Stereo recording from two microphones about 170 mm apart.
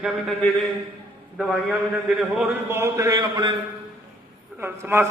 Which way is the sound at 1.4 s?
5° right (ahead or behind).